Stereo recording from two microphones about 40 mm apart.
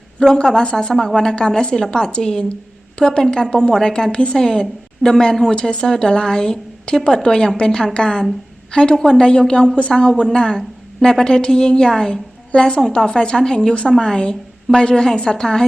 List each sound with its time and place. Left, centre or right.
0.2 s a woman's voice: centre
4.4 s a woman's voice: centre